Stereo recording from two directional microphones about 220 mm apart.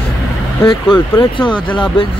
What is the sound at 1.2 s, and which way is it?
Speech, 20° left (ahead or behind).